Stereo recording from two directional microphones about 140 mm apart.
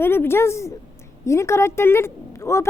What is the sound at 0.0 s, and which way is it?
A woman's voice, 15° left (ahead or behind).